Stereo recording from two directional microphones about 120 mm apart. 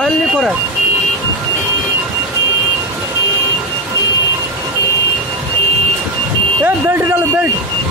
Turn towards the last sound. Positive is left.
turn(degrees=-20)  # may be behind; listen again after turning